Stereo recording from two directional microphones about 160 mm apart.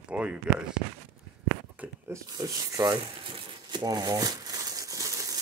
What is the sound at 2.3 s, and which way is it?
Speech, 20° right (ahead or behind).